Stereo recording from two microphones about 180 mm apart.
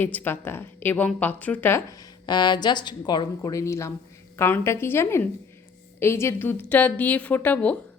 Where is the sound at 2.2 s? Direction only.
25° left (ahead or behind).